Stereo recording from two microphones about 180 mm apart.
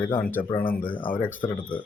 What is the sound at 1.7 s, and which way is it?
Speech, 30° left (ahead or behind).